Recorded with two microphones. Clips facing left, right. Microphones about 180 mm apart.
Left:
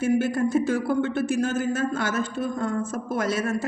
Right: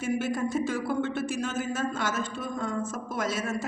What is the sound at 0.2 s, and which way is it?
A woman's voice, 55° left (ahead or behind).